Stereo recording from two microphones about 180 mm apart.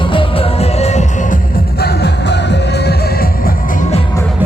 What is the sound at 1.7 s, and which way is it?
Music, 65° left (ahead or behind).